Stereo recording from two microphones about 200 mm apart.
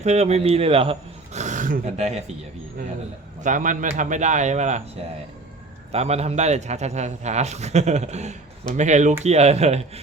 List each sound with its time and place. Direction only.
0.0 s speech: 35° right (ahead or behind)
3.4 s a man's voice: 40° right (ahead or behind)
5.9 s a man's voice: 30° right (ahead or behind)